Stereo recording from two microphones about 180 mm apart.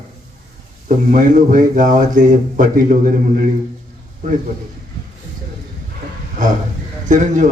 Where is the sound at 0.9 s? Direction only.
45° right (ahead or behind).